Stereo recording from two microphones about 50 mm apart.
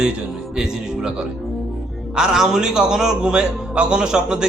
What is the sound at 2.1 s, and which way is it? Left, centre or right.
A man's voice, centre.